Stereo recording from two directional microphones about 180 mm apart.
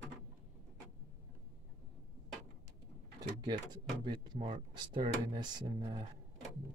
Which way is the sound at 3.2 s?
25° right (ahead or behind).